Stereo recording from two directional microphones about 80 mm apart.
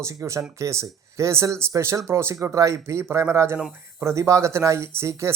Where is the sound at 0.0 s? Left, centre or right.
Right.